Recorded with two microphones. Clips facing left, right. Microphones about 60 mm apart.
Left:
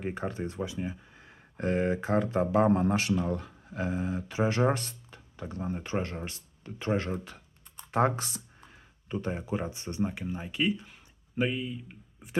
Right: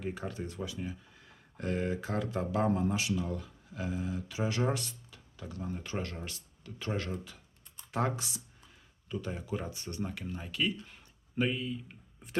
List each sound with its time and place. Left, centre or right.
0.0 s speech: left
2.8 s speech: left
7.1 s speech: left
10.8 s speech: centre